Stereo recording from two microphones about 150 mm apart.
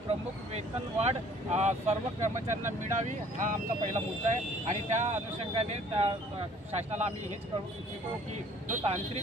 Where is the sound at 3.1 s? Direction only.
60° right (ahead or behind).